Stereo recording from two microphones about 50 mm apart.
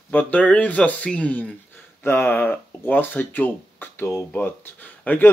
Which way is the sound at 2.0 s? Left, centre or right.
Left.